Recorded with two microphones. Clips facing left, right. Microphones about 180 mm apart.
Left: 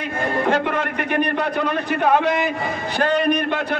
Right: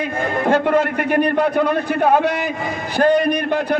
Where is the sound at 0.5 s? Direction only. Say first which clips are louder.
Right 9 dB; 45° right (ahead or behind).